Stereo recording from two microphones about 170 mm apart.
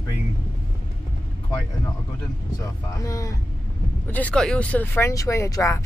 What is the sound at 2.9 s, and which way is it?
Speech, 20° left (ahead or behind).